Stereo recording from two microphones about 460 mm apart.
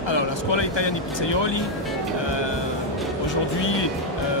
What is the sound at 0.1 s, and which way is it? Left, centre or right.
Speech, left.